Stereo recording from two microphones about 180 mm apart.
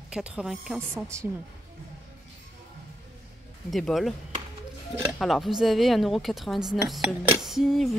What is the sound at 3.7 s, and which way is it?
Speech, centre (ahead or behind).